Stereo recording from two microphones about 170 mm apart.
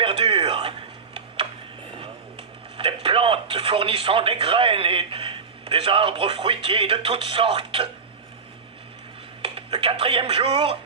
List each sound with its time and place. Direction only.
0.0 s a sound: 30° right (ahead or behind)
2.7 s speech: 30° right (ahead or behind)
9.4 s speech: 35° right (ahead or behind)